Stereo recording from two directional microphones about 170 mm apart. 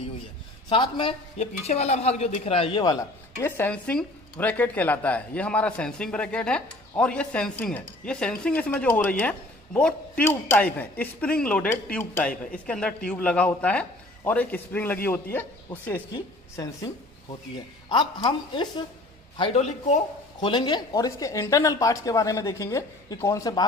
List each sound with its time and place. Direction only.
0.7 s a woman's voice: 30° left (ahead or behind)
3.3 s speech: 10° left (ahead or behind)
16.1 s a man's voice: 25° left (ahead or behind)